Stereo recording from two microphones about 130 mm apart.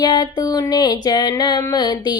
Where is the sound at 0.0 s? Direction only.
30° left (ahead or behind).